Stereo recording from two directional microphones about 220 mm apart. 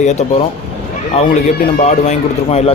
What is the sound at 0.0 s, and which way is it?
Speech, 30° left (ahead or behind).